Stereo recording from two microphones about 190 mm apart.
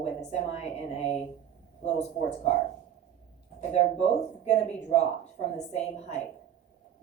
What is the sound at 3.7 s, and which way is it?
Speech, 35° left (ahead or behind).